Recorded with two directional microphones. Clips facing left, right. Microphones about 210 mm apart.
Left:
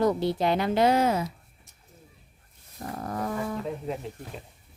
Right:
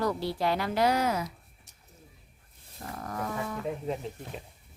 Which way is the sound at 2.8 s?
30° left (ahead or behind).